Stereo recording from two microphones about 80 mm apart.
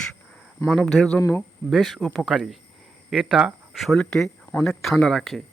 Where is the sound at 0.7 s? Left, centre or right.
Centre.